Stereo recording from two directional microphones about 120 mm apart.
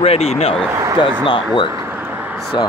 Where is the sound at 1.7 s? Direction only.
20° right (ahead or behind).